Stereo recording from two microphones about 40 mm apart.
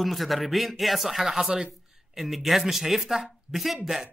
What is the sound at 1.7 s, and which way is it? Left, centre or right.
A woman's voice, centre.